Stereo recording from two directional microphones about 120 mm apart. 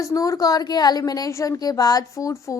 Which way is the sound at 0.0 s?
30° left (ahead or behind).